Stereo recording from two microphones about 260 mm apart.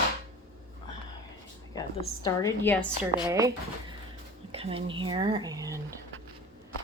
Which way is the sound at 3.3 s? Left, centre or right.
Centre.